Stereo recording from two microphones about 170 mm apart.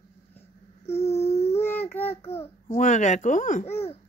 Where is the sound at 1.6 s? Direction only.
10° left (ahead or behind).